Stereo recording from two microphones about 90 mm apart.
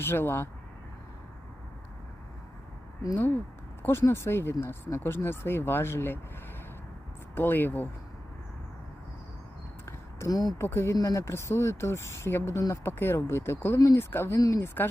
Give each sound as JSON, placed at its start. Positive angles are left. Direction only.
{"t": 0.0, "sound": "speech", "side_deg": 25}
{"t": 3.8, "sound": "speech", "side_deg": 30}
{"t": 7.3, "sound": "speech", "side_deg": 20}
{"t": 10.2, "sound": "speech", "side_deg": 40}
{"t": 10.7, "sound": "speech", "side_deg": 30}
{"t": 13.7, "sound": "speech", "side_deg": 40}
{"t": 14.0, "sound": "speech", "side_deg": 25}